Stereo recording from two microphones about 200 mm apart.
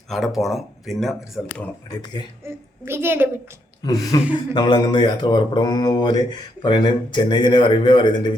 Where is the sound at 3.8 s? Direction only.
20° left (ahead or behind).